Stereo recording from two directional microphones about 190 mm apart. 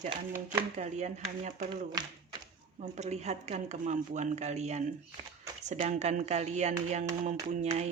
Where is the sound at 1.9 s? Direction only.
20° right (ahead or behind).